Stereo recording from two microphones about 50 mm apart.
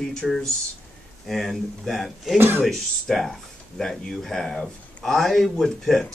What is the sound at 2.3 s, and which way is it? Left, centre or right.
Speech, right.